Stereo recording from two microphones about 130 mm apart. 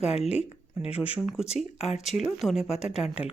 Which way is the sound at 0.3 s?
10° right (ahead or behind).